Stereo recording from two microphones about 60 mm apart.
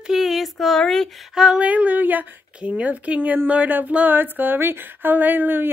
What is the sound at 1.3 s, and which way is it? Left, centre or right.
Female singing, centre.